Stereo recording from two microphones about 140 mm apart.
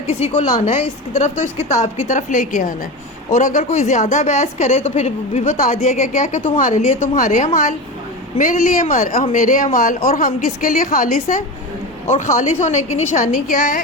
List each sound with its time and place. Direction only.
0.1 s a woman's voice: 50° left (ahead or behind)
5.5 s a woman's voice: 65° left (ahead or behind)
12.1 s a woman's voice: 60° left (ahead or behind)
13.3 s a woman's voice: 70° left (ahead or behind)